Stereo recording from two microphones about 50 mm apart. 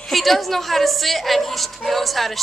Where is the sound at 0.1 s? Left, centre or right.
Centre.